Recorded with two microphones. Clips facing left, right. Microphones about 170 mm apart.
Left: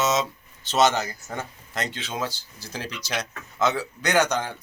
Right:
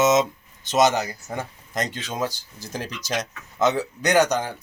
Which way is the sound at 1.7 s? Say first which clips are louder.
Right 3 dB; 40° right (ahead or behind).